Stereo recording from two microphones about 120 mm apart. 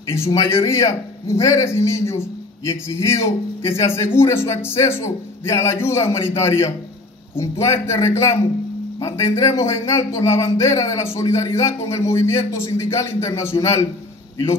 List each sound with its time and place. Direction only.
0.1 s a man's voice: 25° left (ahead or behind)